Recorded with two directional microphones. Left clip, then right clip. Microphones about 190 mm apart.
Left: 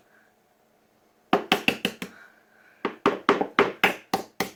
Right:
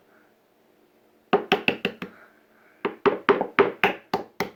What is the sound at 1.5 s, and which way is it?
Music, 15° right (ahead or behind).